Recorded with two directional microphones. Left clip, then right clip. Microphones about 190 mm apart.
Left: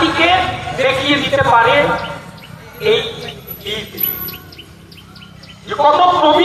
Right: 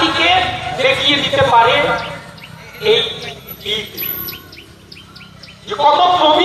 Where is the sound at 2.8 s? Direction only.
35° right (ahead or behind).